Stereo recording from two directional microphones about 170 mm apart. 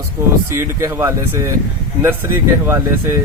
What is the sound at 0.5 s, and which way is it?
Speech, 15° right (ahead or behind).